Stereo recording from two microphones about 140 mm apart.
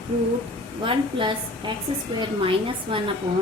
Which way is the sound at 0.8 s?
35° right (ahead or behind).